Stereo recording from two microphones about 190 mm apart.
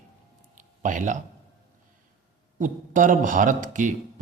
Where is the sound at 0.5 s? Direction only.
40° right (ahead or behind).